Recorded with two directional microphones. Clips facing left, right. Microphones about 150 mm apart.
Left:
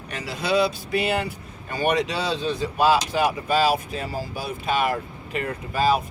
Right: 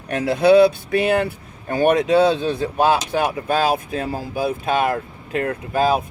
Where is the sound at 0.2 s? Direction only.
55° right (ahead or behind).